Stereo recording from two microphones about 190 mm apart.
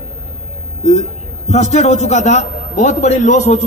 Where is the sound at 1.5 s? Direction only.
35° left (ahead or behind).